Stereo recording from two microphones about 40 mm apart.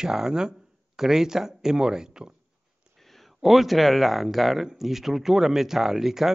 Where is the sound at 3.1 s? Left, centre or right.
Centre.